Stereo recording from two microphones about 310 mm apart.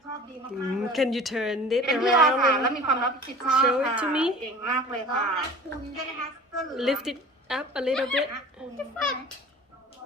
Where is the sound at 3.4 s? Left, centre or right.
Centre.